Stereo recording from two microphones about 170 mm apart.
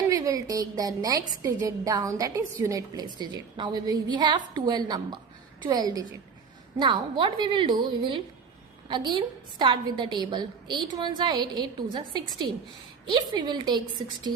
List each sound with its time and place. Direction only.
0.1 s a woman's voice: 20° right (ahead or behind)